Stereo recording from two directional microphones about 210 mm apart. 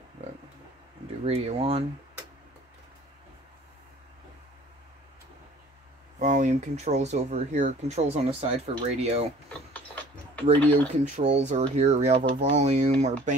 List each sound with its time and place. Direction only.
1.2 s speech: 30° right (ahead or behind)
6.1 s speech: 35° right (ahead or behind)
9.5 s a sound: 10° left (ahead or behind)
10.9 s speech: 30° right (ahead or behind)